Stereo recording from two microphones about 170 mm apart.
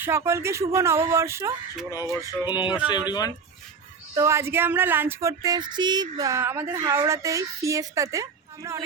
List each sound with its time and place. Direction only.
0.0 s speech: 15° right (ahead or behind)
1.9 s a sound: 20° left (ahead or behind)
4.1 s speech: 15° right (ahead or behind)